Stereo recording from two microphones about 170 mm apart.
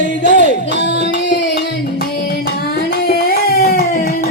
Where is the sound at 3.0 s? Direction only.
60° left (ahead or behind).